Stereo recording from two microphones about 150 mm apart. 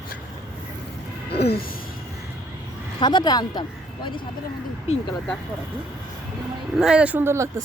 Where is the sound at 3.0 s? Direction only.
30° left (ahead or behind).